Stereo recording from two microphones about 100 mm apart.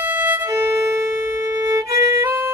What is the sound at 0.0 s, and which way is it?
Violin, 20° right (ahead or behind).